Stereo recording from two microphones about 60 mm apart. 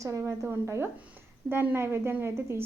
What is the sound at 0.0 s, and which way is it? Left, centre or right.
Speech, right.